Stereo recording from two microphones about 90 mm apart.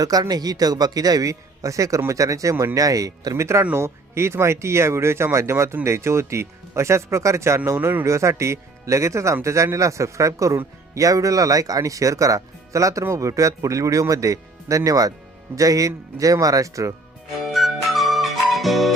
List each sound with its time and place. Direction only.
0.0 s a man's voice: 45° right (ahead or behind); by 8.0 s 25° right (ahead or behind)
8.0 s speech: 35° right (ahead or behind)
17.4 s music: centre (ahead or behind)